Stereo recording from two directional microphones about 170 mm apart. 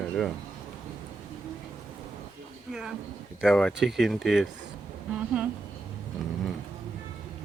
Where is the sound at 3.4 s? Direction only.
5° left (ahead or behind).